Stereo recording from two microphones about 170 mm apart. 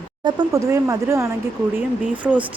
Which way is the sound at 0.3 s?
20° right (ahead or behind).